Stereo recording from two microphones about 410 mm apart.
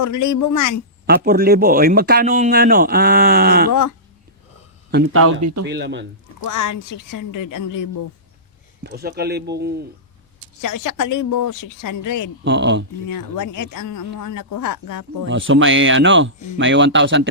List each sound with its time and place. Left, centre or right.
0.0 s speech: left
1.0 s speech: right
3.7 s speech: left
4.9 s speech: right
5.6 s speech: right
6.4 s speech: left
8.8 s speech: right
10.6 s speech: left
12.5 s speech: right
13.1 s speech: left
15.3 s speech: right